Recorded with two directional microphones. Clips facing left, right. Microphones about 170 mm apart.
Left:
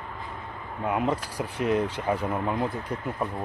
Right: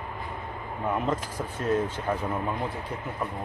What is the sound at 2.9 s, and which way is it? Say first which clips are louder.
Speech: left 3 dB; 5° right (ahead or behind).